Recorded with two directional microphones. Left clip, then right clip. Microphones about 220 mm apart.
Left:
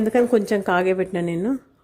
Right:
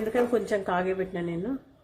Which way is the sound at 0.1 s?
35° left (ahead or behind).